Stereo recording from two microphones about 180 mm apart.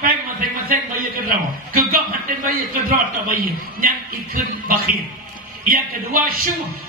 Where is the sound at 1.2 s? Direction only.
55° right (ahead or behind).